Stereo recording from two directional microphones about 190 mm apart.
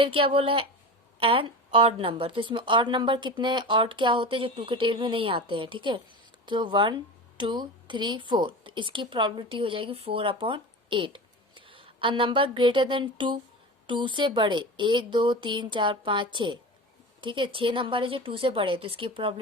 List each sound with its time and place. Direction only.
0.0 s a woman's voice: 30° right (ahead or behind)